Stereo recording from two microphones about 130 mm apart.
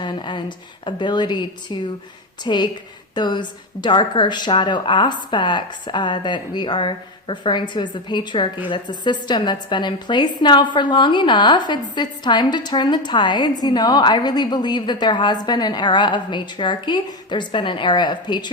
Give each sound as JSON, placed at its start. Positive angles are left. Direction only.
{"t": 0.0, "sound": "a woman's voice", "side_deg": 35}